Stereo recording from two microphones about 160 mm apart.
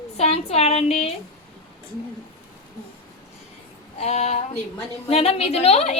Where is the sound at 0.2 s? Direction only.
40° left (ahead or behind).